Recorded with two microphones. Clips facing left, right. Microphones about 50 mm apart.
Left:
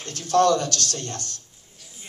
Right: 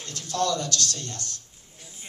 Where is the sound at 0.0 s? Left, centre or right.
Left.